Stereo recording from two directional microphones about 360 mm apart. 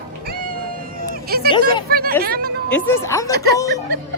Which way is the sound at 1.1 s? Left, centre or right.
Right.